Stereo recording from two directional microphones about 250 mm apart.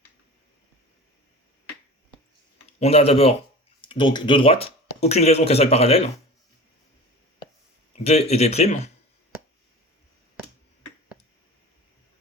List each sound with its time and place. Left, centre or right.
2.7 s speech: left
7.9 s speech: left